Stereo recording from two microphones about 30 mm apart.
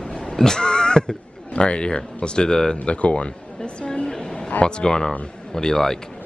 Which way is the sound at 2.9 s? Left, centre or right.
Left.